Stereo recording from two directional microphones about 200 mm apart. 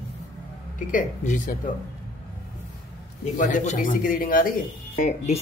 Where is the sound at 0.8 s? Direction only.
40° left (ahead or behind).